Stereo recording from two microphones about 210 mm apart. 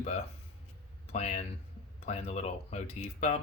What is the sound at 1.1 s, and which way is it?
Speech, 30° left (ahead or behind).